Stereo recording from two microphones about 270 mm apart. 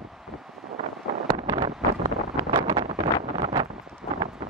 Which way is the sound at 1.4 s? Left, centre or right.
Centre.